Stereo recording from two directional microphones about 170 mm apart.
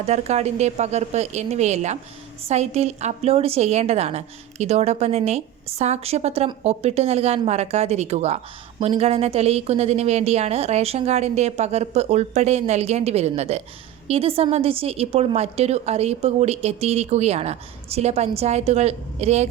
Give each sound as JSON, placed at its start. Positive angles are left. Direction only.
{"t": 0.0, "sound": "a woman's voice", "side_deg": -40}